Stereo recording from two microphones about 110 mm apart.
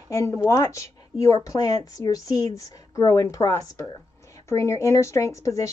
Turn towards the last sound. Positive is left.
turn(degrees=25)  # may be behind; listen again after turning